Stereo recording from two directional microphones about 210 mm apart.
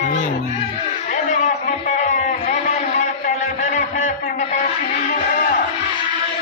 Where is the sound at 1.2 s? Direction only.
35° left (ahead or behind).